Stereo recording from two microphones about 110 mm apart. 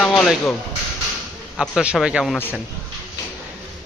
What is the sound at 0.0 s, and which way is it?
Music, 10° left (ahead or behind).